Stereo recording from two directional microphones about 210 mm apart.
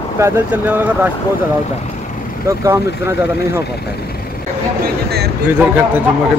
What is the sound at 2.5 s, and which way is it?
Speech, 15° right (ahead or behind).